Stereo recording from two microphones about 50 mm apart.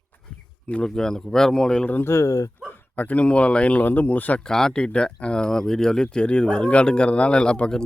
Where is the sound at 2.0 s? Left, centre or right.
Left.